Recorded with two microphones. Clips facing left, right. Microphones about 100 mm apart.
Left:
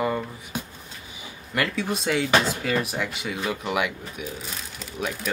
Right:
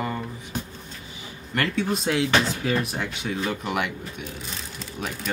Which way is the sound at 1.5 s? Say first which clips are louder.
Right 1 dB; 5° left (ahead or behind).